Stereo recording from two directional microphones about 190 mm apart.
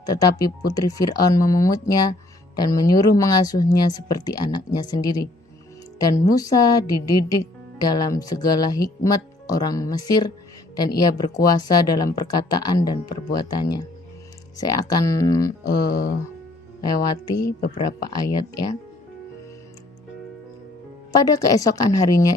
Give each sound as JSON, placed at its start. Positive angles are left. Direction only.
{"t": 0.0, "sound": "speech", "side_deg": 20}
{"t": 15.8, "sound": "music", "side_deg": 55}
{"t": 16.8, "sound": "speech", "side_deg": 20}
{"t": 21.2, "sound": "speech", "side_deg": 20}